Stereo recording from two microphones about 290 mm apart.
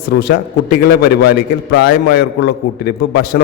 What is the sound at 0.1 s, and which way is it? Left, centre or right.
A man's voice, left.